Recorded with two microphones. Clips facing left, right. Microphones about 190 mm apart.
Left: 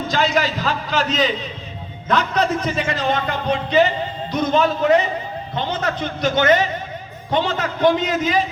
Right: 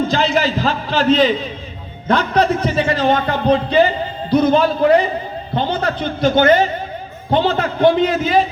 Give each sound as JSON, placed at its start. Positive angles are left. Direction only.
{"t": 0.1, "sound": "a man's voice", "side_deg": -30}